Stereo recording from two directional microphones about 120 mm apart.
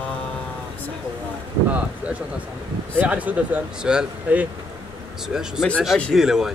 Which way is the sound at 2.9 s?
10° right (ahead or behind).